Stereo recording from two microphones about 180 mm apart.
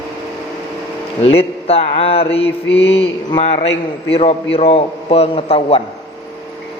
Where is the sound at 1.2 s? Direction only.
35° left (ahead or behind).